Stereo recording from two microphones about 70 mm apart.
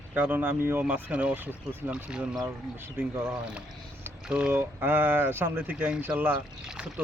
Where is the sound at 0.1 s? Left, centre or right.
Right.